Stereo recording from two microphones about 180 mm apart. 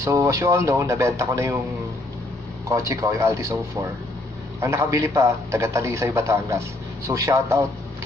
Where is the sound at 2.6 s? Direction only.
20° right (ahead or behind).